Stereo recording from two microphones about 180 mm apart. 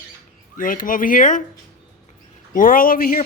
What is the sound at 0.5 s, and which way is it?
Speech, 50° left (ahead or behind).